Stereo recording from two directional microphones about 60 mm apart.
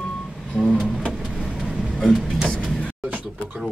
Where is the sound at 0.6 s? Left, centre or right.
Centre.